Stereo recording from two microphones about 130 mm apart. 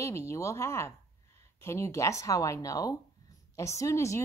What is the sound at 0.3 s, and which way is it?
Speech, 20° left (ahead or behind).